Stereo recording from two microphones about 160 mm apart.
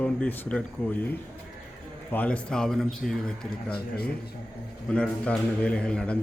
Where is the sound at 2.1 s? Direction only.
10° left (ahead or behind).